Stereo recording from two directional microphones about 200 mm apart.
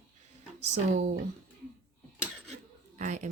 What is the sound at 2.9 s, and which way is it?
Speech, 35° right (ahead or behind).